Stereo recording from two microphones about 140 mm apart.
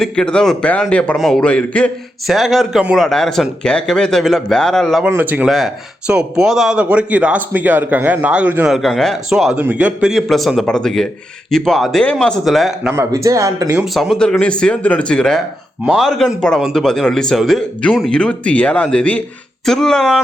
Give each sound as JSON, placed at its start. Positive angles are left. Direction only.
{"t": 0.0, "sound": "a man's voice", "side_deg": 5}
{"t": 5.0, "sound": "speech", "side_deg": -10}
{"t": 5.5, "sound": "a man's voice", "side_deg": 0}
{"t": 12.9, "sound": "speech", "side_deg": -20}
{"t": 13.7, "sound": "a man's voice", "side_deg": 0}